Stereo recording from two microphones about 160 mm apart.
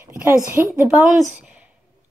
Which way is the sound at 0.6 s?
15° right (ahead or behind).